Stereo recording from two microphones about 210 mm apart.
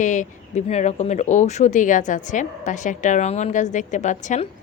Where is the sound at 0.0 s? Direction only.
35° left (ahead or behind).